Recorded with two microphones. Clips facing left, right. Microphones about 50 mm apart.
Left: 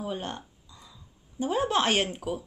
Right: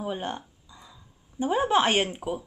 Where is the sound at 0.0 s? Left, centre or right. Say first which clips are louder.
Right 2 dB; centre.